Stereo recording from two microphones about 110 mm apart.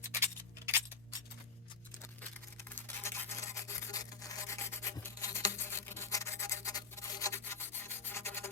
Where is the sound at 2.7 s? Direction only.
20° left (ahead or behind).